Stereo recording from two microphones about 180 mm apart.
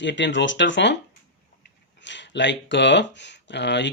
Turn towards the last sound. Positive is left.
turn(degrees=75)  # may be behind; listen again after turning